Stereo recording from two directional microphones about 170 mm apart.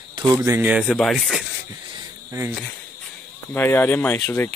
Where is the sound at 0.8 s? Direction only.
5° left (ahead or behind).